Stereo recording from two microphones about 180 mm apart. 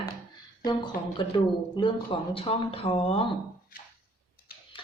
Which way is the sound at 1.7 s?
30° left (ahead or behind).